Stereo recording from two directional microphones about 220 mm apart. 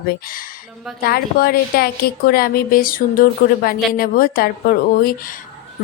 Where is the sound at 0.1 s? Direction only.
40° left (ahead or behind).